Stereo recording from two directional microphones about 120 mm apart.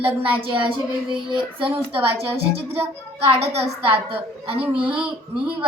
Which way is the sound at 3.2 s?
60° right (ahead or behind).